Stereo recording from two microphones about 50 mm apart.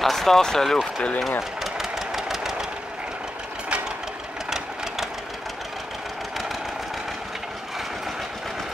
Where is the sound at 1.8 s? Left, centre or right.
Centre.